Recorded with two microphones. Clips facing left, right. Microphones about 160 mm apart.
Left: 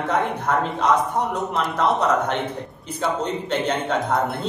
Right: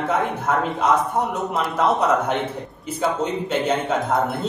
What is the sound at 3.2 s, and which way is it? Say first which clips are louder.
A man's voice: right 1 dB; 5° right (ahead or behind).